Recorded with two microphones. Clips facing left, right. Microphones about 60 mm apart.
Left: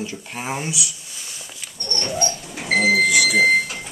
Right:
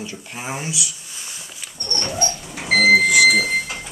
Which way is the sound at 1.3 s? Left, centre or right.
Right.